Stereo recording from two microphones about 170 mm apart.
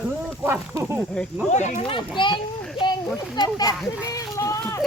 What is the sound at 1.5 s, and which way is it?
Speech, 45° left (ahead or behind).